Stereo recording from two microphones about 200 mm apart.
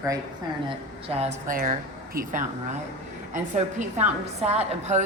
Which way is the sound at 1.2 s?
40° right (ahead or behind).